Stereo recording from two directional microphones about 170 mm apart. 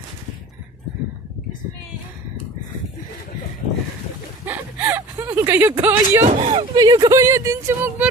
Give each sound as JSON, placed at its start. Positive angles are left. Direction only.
{"t": 4.5, "sound": "a sound", "side_deg": -10}
{"t": 6.2, "sound": "speech", "side_deg": -40}
{"t": 6.7, "sound": "speech", "side_deg": -25}